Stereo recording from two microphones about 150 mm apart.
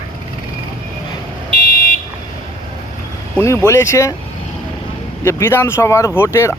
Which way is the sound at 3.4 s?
20° left (ahead or behind).